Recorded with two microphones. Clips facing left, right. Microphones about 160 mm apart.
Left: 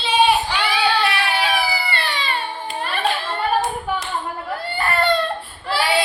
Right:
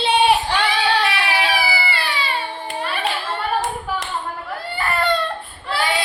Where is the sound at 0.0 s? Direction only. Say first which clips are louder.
Right 1 dB; 65° right (ahead or behind).